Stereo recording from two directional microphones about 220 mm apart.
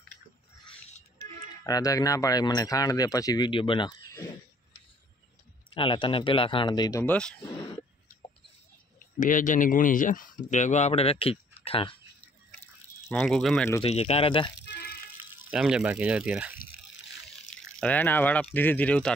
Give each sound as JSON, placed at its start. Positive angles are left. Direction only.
{"t": 1.6, "sound": "speech", "side_deg": 15}
{"t": 5.7, "sound": "speech", "side_deg": 20}
{"t": 7.5, "sound": "throat clearing", "side_deg": 20}
{"t": 9.2, "sound": "speech", "side_deg": 35}
{"t": 13.1, "sound": "speech", "side_deg": 0}
{"t": 13.8, "sound": "speech", "side_deg": 30}
{"t": 14.7, "sound": "a sound", "side_deg": 50}
{"t": 15.5, "sound": "speech", "side_deg": -5}
{"t": 17.7, "sound": "speech", "side_deg": 5}